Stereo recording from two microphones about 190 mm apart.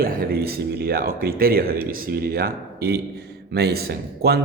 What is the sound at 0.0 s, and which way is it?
A man's voice, 55° right (ahead or behind).